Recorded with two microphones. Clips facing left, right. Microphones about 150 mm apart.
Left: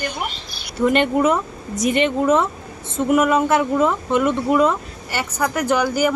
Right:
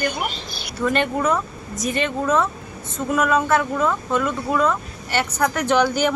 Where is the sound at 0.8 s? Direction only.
20° left (ahead or behind).